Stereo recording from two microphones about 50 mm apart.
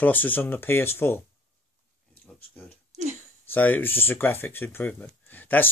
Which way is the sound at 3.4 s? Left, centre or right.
Left.